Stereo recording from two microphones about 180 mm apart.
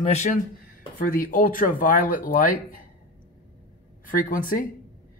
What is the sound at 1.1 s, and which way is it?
Speech, 50° left (ahead or behind).